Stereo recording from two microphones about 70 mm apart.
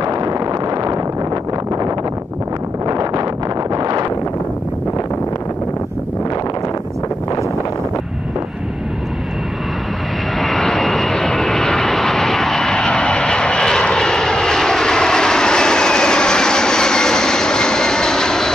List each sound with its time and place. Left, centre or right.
0.0 s a sound: right
2.9 s wind noise: right
10.4 s vehicle: centre